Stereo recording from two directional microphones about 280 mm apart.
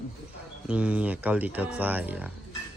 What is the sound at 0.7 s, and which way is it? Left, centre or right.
A woman's voice, centre.